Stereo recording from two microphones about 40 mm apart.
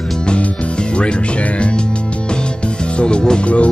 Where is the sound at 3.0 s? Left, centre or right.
Left.